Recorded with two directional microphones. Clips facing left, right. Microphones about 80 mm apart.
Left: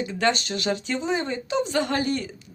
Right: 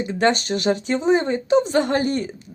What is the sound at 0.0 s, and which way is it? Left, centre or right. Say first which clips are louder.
Speech: right 4 dB; right.